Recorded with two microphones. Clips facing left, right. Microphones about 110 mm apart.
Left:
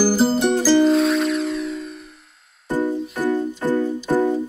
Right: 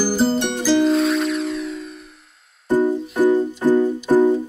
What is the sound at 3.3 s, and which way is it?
Music, 15° right (ahead or behind).